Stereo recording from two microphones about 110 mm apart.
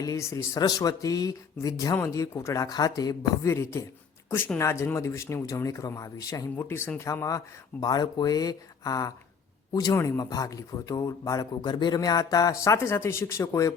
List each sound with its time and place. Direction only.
0.0 s speech: 30° left (ahead or behind)
11.6 s speech: 45° left (ahead or behind)